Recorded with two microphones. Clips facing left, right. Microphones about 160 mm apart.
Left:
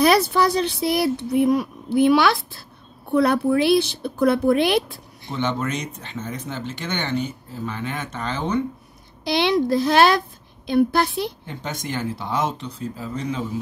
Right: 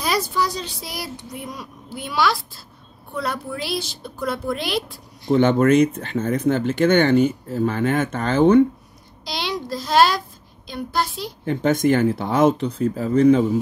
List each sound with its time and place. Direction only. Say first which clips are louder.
0.0 s speech: left 6 dB; 65° left (ahead or behind)
5.3 s speech: right 10 dB; 50° right (ahead or behind)
9.4 s speech: left 9 dB; 60° left (ahead or behind)
11.4 s speech: right 13 dB; 55° right (ahead or behind)